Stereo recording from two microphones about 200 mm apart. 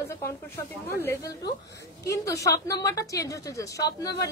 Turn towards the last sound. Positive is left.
turn(degrees=15)  # may be behind; listen again after turning